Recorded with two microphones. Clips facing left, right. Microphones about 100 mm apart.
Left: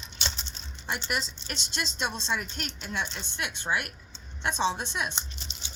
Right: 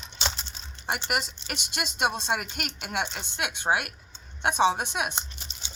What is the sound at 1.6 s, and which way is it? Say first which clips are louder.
Speech: right 1 dB; 10° right (ahead or behind).